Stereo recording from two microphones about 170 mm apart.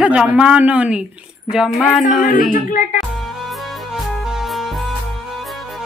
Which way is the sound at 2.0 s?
50° left (ahead or behind).